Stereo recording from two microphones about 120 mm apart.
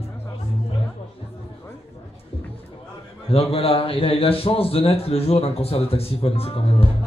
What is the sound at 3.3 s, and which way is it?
A man's voice, 55° left (ahead or behind).